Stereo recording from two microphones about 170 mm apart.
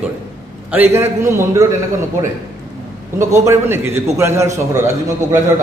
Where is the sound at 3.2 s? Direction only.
15° right (ahead or behind).